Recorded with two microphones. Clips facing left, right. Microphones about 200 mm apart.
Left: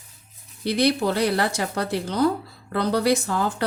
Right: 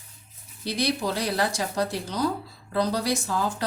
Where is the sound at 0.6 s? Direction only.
60° left (ahead or behind).